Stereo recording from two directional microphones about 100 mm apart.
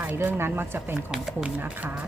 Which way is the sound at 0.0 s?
20° right (ahead or behind).